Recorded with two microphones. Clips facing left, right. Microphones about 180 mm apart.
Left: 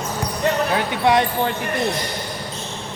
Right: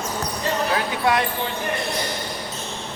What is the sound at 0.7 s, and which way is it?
Speech, 25° left (ahead or behind).